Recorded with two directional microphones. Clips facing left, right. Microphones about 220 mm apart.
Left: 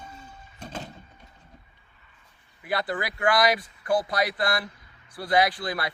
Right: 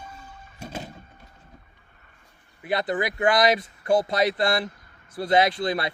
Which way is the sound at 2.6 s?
20° right (ahead or behind).